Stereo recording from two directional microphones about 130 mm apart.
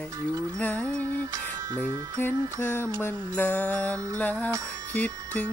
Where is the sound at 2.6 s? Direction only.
15° left (ahead or behind).